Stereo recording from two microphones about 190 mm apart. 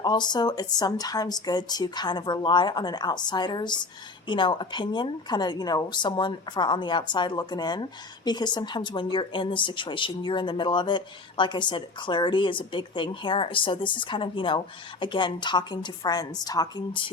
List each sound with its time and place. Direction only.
0.0 s a woman's voice: 20° left (ahead or behind)